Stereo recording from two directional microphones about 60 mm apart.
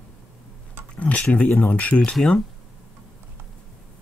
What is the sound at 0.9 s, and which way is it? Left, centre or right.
Speech, left.